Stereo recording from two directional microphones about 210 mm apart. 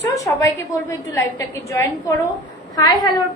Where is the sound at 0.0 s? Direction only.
15° left (ahead or behind).